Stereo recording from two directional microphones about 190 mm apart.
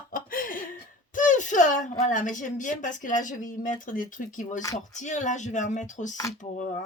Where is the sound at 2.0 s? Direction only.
40° left (ahead or behind).